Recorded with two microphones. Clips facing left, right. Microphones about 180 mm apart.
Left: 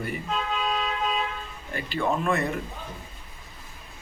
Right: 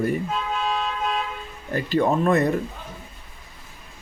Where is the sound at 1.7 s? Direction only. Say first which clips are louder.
Right 6 dB; 40° right (ahead or behind).